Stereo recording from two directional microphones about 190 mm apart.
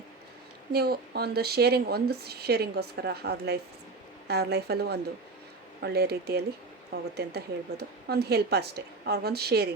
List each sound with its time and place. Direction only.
0.7 s speech: 55° right (ahead or behind)